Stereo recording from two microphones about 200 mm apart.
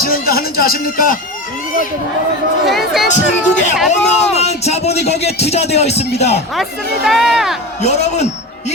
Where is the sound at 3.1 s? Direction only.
35° left (ahead or behind).